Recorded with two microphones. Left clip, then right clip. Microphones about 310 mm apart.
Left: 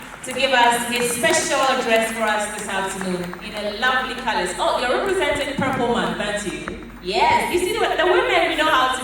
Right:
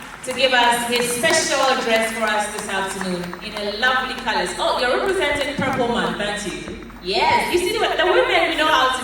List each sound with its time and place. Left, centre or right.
0.3 s a woman's voice: centre
3.8 s a woman's voice: centre